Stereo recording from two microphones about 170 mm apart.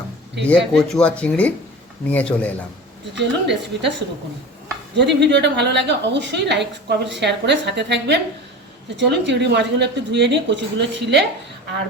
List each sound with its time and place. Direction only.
0.4 s speech: 5° left (ahead or behind)
3.2 s a woman's voice: 90° right
4.9 s a woman's voice: 90° right